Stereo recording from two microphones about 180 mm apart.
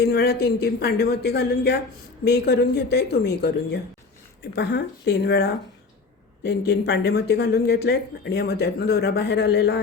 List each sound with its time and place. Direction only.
0.0 s speech: 60° left (ahead or behind)